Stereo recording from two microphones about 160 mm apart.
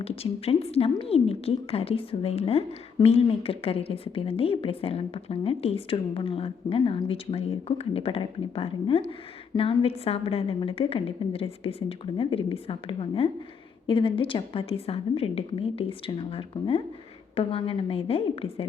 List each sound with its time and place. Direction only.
0.0 s a woman's voice: 40° left (ahead or behind)